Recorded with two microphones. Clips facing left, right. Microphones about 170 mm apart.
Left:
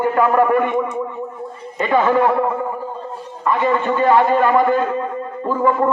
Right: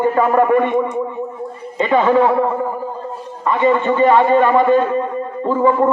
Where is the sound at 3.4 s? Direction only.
20° right (ahead or behind).